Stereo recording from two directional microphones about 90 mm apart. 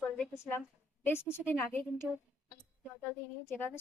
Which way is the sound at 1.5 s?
20° left (ahead or behind).